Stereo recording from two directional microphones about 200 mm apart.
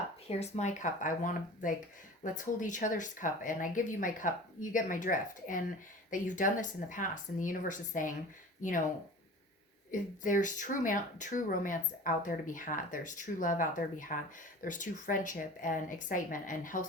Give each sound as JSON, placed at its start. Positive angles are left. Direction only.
{"t": 0.3, "sound": "speech", "side_deg": 35}
{"t": 9.9, "sound": "speech", "side_deg": 40}